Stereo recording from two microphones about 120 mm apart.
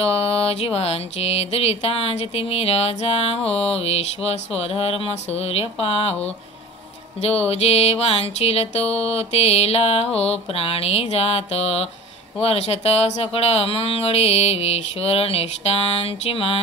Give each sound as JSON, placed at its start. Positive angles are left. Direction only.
{"t": 0.0, "sound": "music", "side_deg": 55}